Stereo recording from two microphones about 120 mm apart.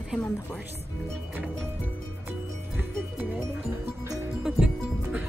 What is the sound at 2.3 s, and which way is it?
Music, 15° right (ahead or behind).